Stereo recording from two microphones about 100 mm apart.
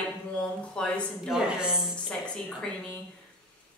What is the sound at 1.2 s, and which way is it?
Speech, 5° right (ahead or behind).